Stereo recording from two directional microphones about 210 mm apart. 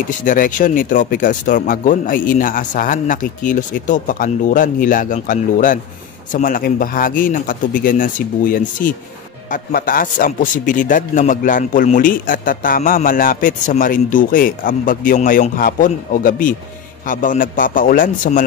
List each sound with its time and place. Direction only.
0.2 s a man's voice: 40° left (ahead or behind)